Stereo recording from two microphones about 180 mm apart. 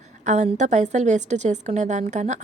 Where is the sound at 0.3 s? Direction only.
40° right (ahead or behind).